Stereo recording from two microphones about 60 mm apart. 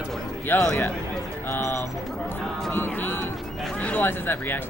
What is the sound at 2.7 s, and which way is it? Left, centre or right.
Speech, left.